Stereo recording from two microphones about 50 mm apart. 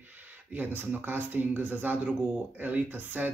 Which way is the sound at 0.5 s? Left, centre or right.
Right.